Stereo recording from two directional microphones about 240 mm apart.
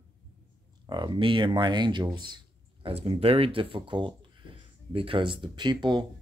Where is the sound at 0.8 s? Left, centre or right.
Centre.